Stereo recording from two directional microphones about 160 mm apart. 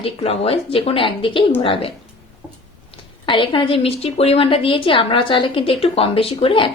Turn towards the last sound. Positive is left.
turn(degrees=35)  # may be behind; listen again after turning